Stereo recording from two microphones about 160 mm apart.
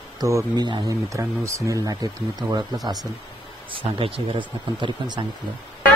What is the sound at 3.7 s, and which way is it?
Speech, 35° right (ahead or behind).